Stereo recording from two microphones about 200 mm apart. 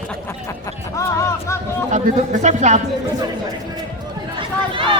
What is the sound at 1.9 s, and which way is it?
Speech, 40° right (ahead or behind).